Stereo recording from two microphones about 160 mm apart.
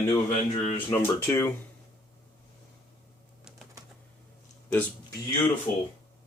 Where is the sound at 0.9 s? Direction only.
15° left (ahead or behind).